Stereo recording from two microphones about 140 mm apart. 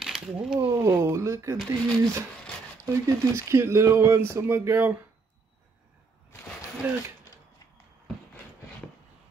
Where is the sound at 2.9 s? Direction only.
20° right (ahead or behind).